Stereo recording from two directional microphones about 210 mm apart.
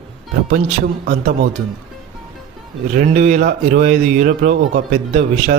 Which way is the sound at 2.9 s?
40° right (ahead or behind).